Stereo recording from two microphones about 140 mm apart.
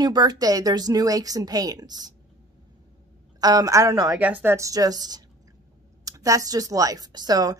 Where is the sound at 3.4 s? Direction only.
25° right (ahead or behind).